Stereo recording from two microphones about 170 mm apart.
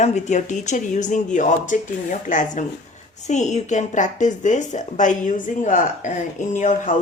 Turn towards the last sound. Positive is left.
turn(degrees=50)  # may be behind; listen again after turning